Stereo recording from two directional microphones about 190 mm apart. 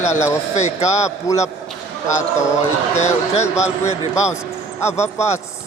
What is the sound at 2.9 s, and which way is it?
Speech, 35° left (ahead or behind).